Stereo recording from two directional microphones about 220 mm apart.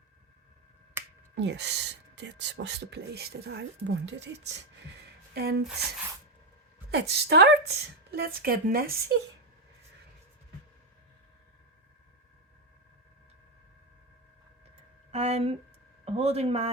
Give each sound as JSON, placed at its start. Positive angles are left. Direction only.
{"t": 1.0, "sound": "finger snapping", "side_deg": -10}
{"t": 1.4, "sound": "speech", "side_deg": -50}
{"t": 6.9, "sound": "speech", "side_deg": -50}
{"t": 15.1, "sound": "a sound", "side_deg": -30}
{"t": 16.0, "sound": "speech", "side_deg": -30}